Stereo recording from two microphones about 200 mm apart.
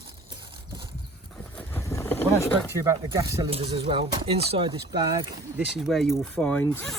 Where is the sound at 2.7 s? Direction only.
15° right (ahead or behind).